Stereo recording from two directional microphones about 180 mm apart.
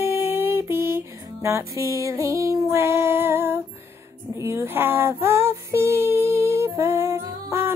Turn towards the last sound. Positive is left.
turn(degrees=-15)  # may be behind; listen again after turning